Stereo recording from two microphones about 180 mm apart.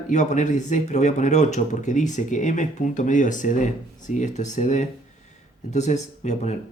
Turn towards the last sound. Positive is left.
turn(degrees=40)  # may be behind; listen again after turning